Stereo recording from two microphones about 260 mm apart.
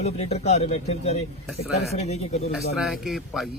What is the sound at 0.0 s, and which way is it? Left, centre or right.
Speech, left.